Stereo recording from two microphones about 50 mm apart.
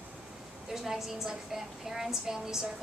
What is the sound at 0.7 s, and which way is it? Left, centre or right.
A woman's voice, centre.